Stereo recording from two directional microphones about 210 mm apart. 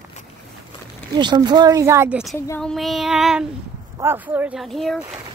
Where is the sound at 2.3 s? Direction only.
10° left (ahead or behind).